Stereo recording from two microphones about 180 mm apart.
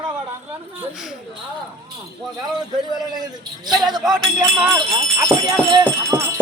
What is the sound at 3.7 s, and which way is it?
Speech, centre (ahead or behind).